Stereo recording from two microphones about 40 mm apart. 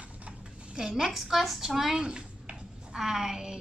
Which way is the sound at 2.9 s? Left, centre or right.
Centre.